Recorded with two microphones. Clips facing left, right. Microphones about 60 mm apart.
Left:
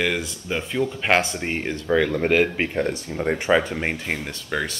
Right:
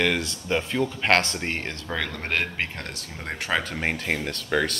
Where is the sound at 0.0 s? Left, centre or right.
Centre.